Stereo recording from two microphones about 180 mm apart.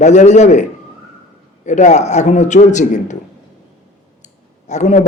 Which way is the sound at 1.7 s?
40° left (ahead or behind).